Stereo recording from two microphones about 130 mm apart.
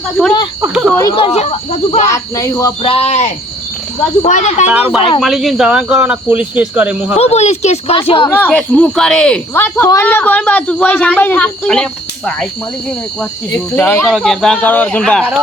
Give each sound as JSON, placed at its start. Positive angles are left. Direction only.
{"t": 0.7, "sound": "speech", "side_deg": -5}
{"t": 1.1, "sound": "speech", "side_deg": 45}
{"t": 2.1, "sound": "speech", "side_deg": 25}
{"t": 2.8, "sound": "speech", "side_deg": 50}
{"t": 4.7, "sound": "speech", "side_deg": -10}
{"t": 7.2, "sound": "speech", "side_deg": 55}
{"t": 7.9, "sound": "speech", "side_deg": 45}
{"t": 8.3, "sound": "speech", "side_deg": 10}
{"t": 13.7, "sound": "speech", "side_deg": 15}
{"t": 14.1, "sound": "speech", "side_deg": 5}